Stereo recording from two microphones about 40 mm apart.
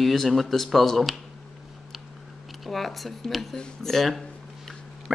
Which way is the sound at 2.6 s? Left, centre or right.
Centre.